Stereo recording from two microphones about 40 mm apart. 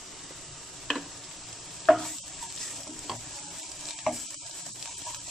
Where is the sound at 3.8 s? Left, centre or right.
Centre.